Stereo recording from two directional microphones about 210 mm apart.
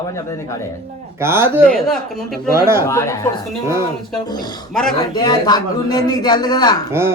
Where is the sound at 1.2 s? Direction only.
10° right (ahead or behind).